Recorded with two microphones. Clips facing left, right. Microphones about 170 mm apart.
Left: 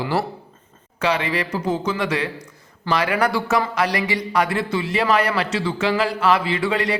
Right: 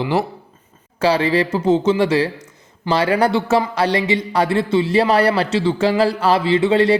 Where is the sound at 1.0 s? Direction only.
30° right (ahead or behind).